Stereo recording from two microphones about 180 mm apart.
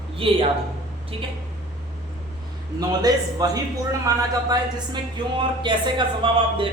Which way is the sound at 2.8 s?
20° right (ahead or behind).